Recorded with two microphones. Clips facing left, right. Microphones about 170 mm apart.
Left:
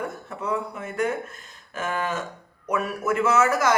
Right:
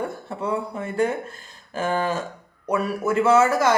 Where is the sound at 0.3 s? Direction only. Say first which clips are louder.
Right 1 dB; 30° right (ahead or behind).